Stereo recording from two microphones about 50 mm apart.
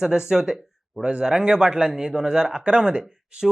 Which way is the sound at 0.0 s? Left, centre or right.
Centre.